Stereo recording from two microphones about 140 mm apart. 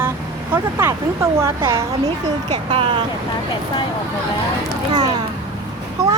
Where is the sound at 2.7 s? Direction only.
35° right (ahead or behind).